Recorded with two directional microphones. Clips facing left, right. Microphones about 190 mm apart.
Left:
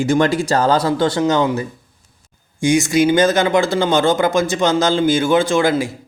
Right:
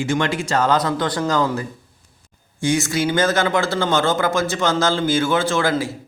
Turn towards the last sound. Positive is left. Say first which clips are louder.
# left 4 dB
turn(degrees=15)  # may be behind; listen again after turning